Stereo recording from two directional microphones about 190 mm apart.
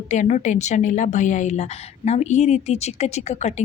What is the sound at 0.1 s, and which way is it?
A woman's voice, 40° left (ahead or behind).